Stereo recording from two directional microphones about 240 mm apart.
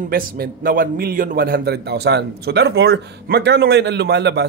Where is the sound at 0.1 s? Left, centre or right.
Right.